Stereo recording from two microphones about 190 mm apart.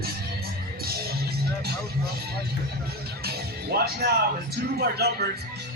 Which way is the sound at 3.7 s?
55° right (ahead or behind).